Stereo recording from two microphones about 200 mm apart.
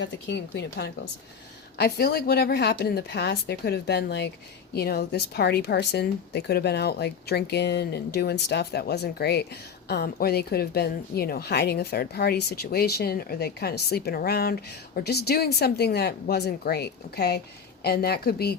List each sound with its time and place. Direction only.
0.0 s a woman's voice: 60° left (ahead or behind)